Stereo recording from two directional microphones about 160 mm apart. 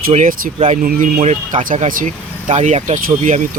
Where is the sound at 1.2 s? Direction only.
45° right (ahead or behind).